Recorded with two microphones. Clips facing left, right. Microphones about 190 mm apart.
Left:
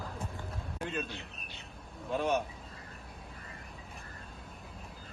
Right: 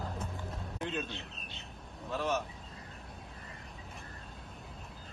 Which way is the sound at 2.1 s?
15° left (ahead or behind).